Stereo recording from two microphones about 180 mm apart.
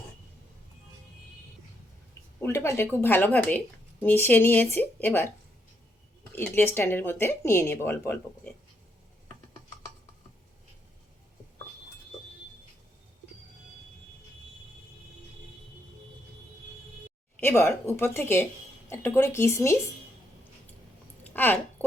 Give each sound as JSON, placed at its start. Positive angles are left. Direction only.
{"t": 2.4, "sound": "speech", "side_deg": 15}
{"t": 6.5, "sound": "speech", "side_deg": 10}
{"t": 17.4, "sound": "speech", "side_deg": 15}
{"t": 21.2, "sound": "a sound", "side_deg": 10}